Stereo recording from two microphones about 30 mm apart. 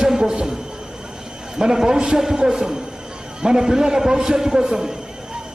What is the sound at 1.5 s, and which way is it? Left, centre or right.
A man's voice, right.